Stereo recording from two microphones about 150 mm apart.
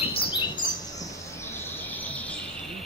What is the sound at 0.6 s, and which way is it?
Bird, 30° left (ahead or behind).